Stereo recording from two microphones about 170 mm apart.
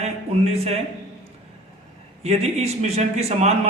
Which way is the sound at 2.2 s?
40° right (ahead or behind).